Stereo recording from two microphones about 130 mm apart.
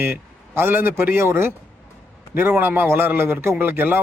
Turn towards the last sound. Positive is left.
turn(degrees=-15)  # may be behind; listen again after turning